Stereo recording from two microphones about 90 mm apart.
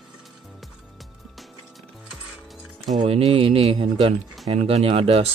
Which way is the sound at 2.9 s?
90° right.